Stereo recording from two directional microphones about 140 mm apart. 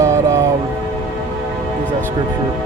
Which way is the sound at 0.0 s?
20° right (ahead or behind).